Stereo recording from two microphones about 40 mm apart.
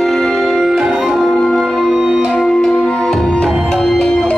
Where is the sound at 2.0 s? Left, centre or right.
Centre.